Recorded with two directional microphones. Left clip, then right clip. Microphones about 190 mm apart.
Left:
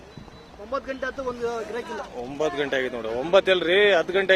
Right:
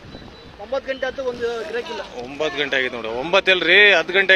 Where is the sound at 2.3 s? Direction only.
20° left (ahead or behind).